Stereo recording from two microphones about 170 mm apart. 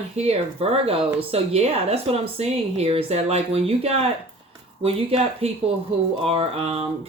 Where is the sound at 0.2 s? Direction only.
35° right (ahead or behind).